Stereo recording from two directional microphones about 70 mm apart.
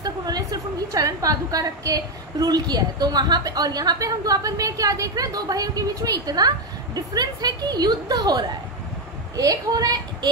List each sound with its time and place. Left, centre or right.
0.0 s a woman's voice: right